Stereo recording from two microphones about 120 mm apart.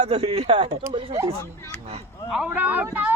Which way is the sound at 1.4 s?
25° left (ahead or behind).